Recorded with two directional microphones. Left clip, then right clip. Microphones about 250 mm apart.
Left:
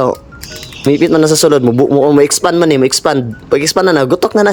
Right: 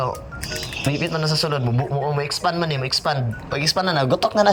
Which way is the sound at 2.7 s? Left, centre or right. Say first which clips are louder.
Left 12 dB; left.